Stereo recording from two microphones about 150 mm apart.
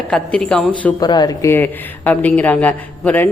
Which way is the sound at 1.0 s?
30° left (ahead or behind).